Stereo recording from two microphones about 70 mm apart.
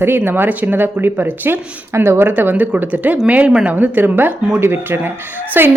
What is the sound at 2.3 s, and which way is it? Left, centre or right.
A woman's voice, right.